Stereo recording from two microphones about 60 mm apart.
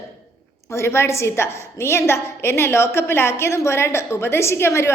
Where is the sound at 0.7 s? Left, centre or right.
Left.